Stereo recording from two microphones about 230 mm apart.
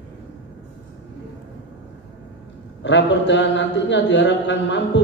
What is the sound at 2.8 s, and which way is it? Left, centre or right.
A man's voice, left.